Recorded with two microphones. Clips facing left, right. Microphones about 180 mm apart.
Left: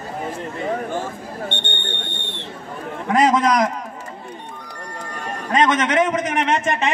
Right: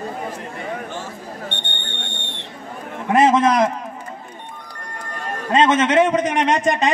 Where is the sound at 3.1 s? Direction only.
25° right (ahead or behind).